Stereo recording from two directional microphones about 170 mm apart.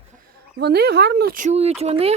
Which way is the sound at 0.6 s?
70° right (ahead or behind).